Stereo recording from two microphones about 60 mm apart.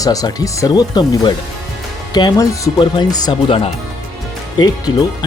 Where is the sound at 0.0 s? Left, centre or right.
Left.